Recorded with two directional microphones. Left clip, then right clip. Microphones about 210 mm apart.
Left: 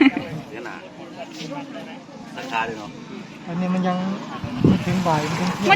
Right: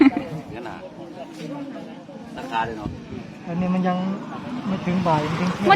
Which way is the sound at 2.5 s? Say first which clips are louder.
Even; 45° right (ahead or behind).